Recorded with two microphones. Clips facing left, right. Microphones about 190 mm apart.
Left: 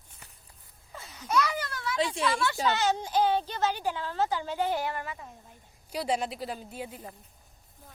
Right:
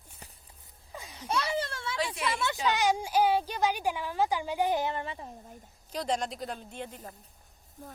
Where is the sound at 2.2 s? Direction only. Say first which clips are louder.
Left 1 dB; 20° right (ahead or behind).